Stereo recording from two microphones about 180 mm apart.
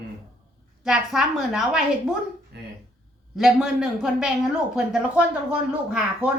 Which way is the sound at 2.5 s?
65° right (ahead or behind).